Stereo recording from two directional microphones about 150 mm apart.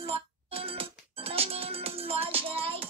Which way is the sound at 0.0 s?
40° right (ahead or behind).